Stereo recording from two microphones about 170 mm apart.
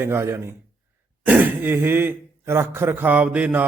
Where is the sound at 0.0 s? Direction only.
15° right (ahead or behind).